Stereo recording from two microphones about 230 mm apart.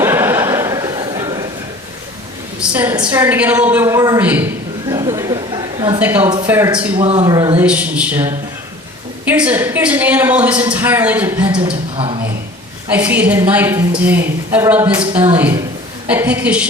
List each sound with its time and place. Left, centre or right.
0.0 s a sound: centre
2.6 s a woman's voice: centre
6.9 s a woman's voice: right
7.6 s a woman's voice: centre
11.5 s speech: right
12.9 s a woman's voice: centre